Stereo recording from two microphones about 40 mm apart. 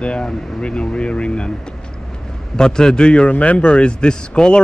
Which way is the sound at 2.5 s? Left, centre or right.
Centre.